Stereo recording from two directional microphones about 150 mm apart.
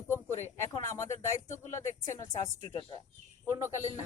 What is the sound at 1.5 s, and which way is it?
Speech, 55° left (ahead or behind).